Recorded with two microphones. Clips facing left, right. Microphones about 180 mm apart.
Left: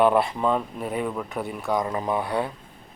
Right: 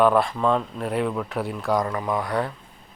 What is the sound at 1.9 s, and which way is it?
Speech, 25° left (ahead or behind).